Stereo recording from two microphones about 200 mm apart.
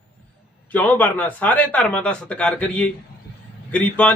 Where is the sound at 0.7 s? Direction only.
10° left (ahead or behind).